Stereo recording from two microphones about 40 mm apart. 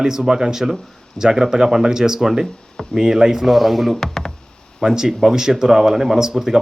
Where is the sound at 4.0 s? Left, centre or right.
Centre.